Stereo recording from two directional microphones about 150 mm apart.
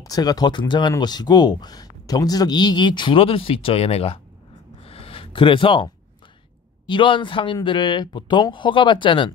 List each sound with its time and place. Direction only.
0.0 s speech: 25° left (ahead or behind); by 4.2 s 40° left (ahead or behind)
4.8 s a sound: 40° left (ahead or behind)
6.9 s speech: 35° left (ahead or behind)